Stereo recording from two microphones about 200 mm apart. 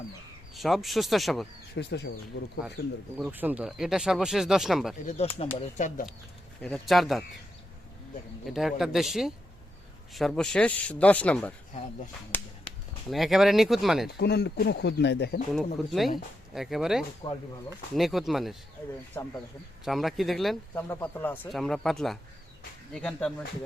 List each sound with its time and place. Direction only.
0.5 s speech: centre (ahead or behind)
1.7 s speech: 60° left (ahead or behind)
3.2 s speech: 5° right (ahead or behind)
5.0 s speech: 30° left (ahead or behind)
6.6 s speech: 5° left (ahead or behind)
8.4 s speech: centre (ahead or behind)
14.2 s speech: 55° left (ahead or behind)
15.5 s speech: centre (ahead or behind)
17.2 s speech: 25° left (ahead or behind)
17.9 s speech: centre (ahead or behind)
19.8 s speech: centre (ahead or behind)